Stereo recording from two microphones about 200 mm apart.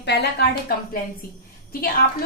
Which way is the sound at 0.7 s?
45° left (ahead or behind).